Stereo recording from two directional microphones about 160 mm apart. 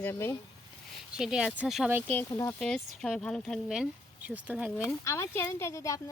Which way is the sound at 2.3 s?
15° left (ahead or behind).